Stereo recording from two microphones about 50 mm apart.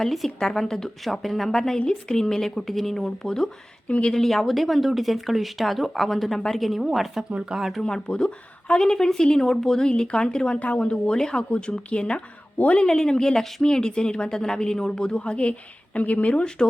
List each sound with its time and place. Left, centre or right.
0.0 s a woman's voice: centre
3.8 s speech: left
4.1 s speech: centre
7.3 s speech: centre
7.6 s speech: centre
7.9 s a woman's voice: centre
12.8 s a woman's voice: centre; by 16.4 s left
16.6 s speech: centre